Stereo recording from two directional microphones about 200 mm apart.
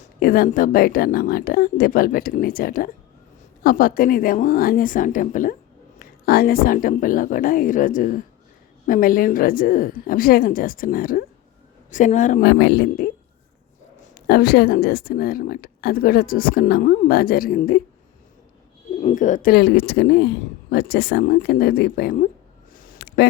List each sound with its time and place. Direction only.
0.2 s a woman's voice: 50° left (ahead or behind)
12.4 s speech: 55° left (ahead or behind)
14.3 s speech: 55° left (ahead or behind)
19.0 s speech: 40° left (ahead or behind)
22.7 s a sound: 45° left (ahead or behind)